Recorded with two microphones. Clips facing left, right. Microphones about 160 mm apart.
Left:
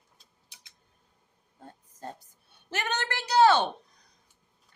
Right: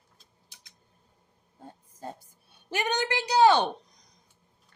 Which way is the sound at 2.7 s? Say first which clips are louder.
Right 4 dB; 15° right (ahead or behind).